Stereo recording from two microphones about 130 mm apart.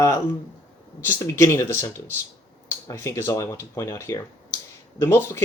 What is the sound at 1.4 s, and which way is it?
Speech, 20° left (ahead or behind).